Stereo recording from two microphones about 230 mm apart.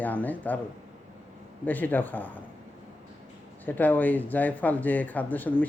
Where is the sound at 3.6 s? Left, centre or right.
Centre.